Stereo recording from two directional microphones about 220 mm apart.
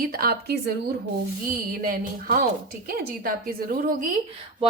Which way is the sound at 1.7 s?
40° right (ahead or behind).